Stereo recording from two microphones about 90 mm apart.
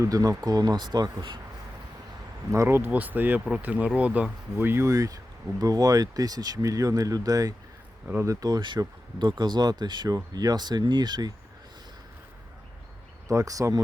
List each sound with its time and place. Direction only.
0.0 s speech: 40° right (ahead or behind); by 1.4 s 60° right (ahead or behind)
2.5 s speech: 30° right (ahead or behind)
4.5 s speech: 25° right (ahead or behind); by 11.3 s 55° right (ahead or behind)
13.2 s speech: 40° right (ahead or behind)